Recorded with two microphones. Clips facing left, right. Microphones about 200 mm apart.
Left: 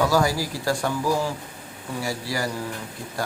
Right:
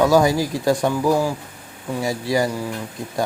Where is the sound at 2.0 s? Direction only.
20° right (ahead or behind).